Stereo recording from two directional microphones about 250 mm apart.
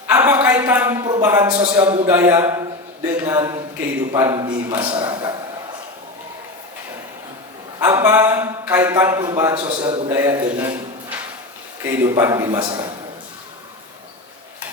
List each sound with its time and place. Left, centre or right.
0.1 s a sound: centre
1.8 s a man's voice: right
2.0 s a man's voice: centre
7.8 s a man's voice: centre
10.1 s a man's voice: centre